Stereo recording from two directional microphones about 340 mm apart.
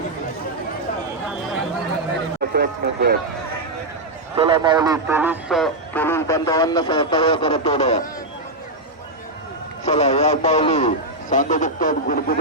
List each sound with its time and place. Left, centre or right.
2.5 s speech: right
4.4 s speech: centre
9.8 s a man's voice: centre